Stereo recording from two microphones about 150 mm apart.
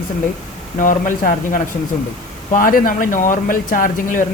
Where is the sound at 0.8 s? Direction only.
60° left (ahead or behind).